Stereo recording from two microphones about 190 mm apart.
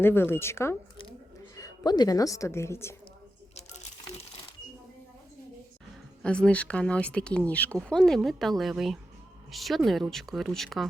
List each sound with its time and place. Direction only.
0.0 s a woman's voice: 10° left (ahead or behind)
3.5 s a sound: 35° left (ahead or behind)
6.2 s speech: 5° left (ahead or behind)